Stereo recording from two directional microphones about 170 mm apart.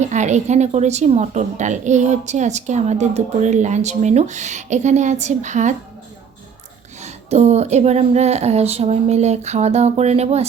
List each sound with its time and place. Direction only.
0.0 s a woman's voice: 45° right (ahead or behind)
7.0 s speech: 40° right (ahead or behind)